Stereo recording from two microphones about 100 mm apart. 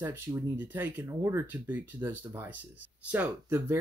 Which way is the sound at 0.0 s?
25° right (ahead or behind).